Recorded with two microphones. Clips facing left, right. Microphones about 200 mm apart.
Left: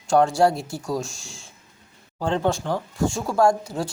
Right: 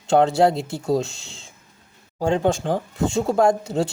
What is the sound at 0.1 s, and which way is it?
Speech, 25° right (ahead or behind).